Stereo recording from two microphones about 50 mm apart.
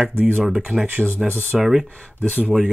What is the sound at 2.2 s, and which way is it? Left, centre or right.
Speech, left.